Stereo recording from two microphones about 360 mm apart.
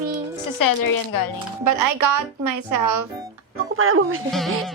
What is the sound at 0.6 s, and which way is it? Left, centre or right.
Speech, left.